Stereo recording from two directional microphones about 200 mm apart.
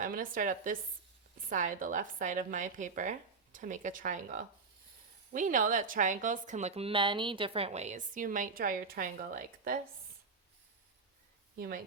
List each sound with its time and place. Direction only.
0.0 s a woman's voice: 45° right (ahead or behind)
11.5 s speech: 45° right (ahead or behind)